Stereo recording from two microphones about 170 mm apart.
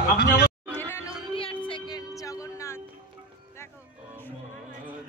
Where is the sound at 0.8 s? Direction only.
15° left (ahead or behind).